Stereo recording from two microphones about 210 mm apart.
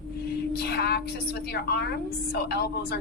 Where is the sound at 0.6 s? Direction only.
50° left (ahead or behind).